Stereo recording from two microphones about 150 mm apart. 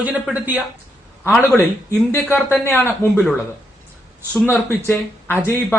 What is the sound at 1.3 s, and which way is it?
Speech, 20° left (ahead or behind).